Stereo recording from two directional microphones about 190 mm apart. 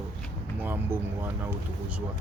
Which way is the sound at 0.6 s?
10° right (ahead or behind).